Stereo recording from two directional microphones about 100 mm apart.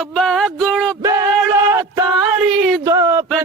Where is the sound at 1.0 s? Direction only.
35° right (ahead or behind).